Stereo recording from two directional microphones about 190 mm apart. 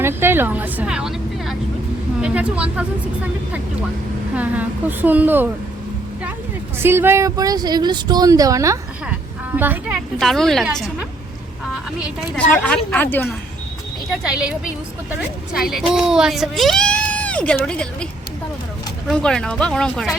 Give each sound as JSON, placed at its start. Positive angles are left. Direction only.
{"t": 0.0, "sound": "a woman's voice", "side_deg": -10}
{"t": 4.4, "sound": "speech", "side_deg": -10}
{"t": 6.7, "sound": "a woman's voice", "side_deg": -10}
{"t": 12.6, "sound": "a woman's voice", "side_deg": 5}
{"t": 14.1, "sound": "a woman's voice", "side_deg": -5}